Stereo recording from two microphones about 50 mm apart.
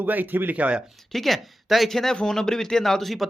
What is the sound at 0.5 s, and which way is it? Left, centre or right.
Speech, right.